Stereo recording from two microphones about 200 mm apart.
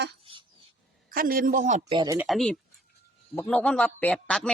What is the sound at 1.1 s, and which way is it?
Speech, 45° right (ahead or behind).